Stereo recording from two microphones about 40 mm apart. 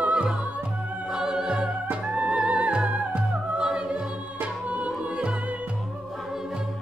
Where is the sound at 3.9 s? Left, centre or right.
Right.